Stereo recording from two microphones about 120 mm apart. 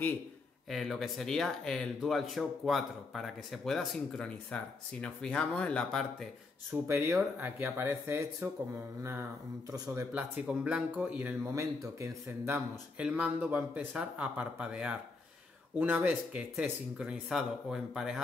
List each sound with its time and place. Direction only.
0.7 s speech: centre (ahead or behind)
6.7 s speech: 25° right (ahead or behind)
10.1 s speech: 10° right (ahead or behind)
11.5 s speech: 25° right (ahead or behind); by 18.2 s centre (ahead or behind)